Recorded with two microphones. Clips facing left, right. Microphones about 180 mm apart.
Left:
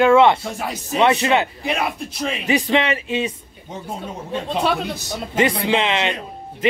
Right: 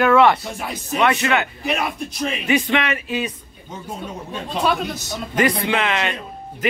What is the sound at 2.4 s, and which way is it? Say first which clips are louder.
Speech: left 2 dB; 35° left (ahead or behind).